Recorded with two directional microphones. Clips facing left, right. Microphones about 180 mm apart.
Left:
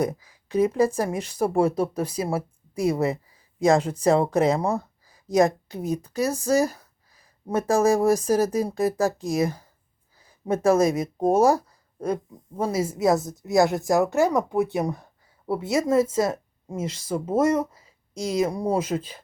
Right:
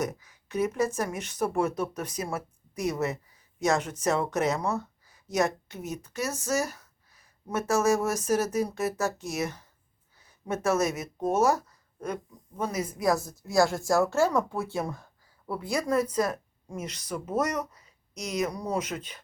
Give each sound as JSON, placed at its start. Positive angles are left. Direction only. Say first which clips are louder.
{"t": 0.0, "sound": "speech", "louder": "left 6 dB", "side_deg": 30}